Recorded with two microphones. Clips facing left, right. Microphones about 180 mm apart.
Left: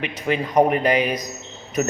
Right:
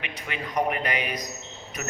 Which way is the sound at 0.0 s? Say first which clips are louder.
Left 11 dB; 35° left (ahead or behind).